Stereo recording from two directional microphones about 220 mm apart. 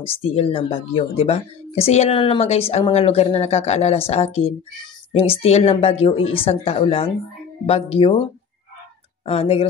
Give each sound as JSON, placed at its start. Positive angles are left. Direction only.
{"t": 0.0, "sound": "speech", "side_deg": 30}